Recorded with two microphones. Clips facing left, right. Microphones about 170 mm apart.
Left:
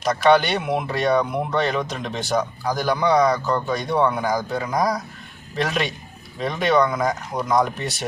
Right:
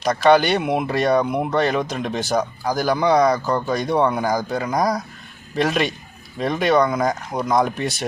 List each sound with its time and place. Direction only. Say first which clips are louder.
0.0 s speech: right 2 dB; centre (ahead or behind)